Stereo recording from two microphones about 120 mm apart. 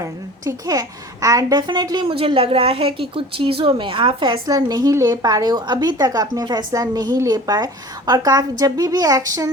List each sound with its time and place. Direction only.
0.0 s a woman's voice: 30° right (ahead or behind)
2.1 s a woman's voice: 50° right (ahead or behind); by 9.5 s 30° right (ahead or behind)